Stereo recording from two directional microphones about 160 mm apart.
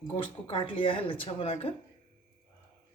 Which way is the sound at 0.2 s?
35° left (ahead or behind).